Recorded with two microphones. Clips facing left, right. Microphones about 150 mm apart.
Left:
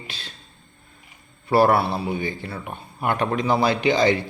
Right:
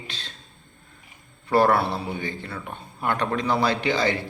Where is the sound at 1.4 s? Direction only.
10° left (ahead or behind).